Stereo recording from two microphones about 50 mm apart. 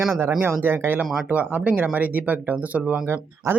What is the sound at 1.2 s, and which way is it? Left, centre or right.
Speech, right.